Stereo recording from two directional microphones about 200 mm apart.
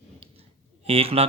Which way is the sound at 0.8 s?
30° right (ahead or behind).